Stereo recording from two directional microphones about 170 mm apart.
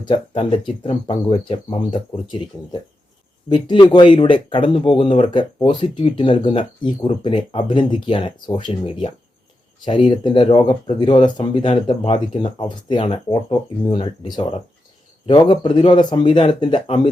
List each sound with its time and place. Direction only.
0.0 s speech: 30° left (ahead or behind)
3.5 s speech: 25° left (ahead or behind)